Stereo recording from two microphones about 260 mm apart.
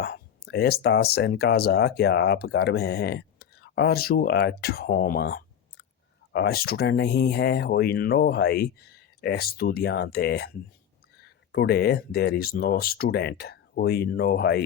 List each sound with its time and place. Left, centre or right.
0.0 s speech: left
11.5 s speech: left